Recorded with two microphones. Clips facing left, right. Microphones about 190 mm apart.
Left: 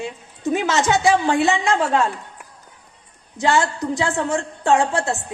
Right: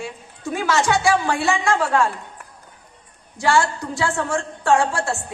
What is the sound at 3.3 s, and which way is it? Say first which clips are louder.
A woman's voice: even; 20° left (ahead or behind).